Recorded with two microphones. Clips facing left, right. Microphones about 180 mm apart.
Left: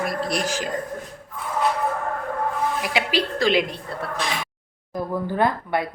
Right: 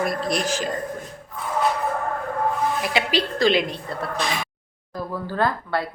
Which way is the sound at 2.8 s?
10° left (ahead or behind).